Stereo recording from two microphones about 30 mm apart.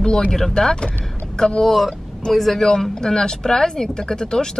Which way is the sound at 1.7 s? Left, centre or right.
Centre.